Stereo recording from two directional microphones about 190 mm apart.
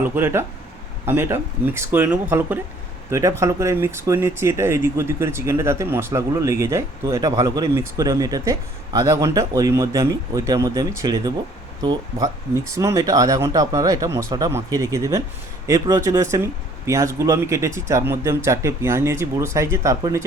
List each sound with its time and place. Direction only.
0.0 s speech: 10° right (ahead or behind)